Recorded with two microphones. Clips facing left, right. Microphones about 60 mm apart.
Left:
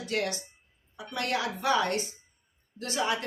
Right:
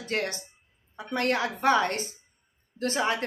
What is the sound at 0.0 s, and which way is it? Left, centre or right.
A woman's voice, right.